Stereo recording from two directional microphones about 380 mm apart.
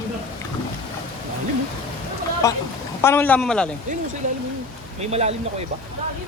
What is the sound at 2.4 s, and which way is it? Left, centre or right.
Speech, centre.